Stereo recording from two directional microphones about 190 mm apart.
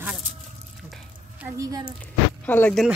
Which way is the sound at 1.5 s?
15° right (ahead or behind).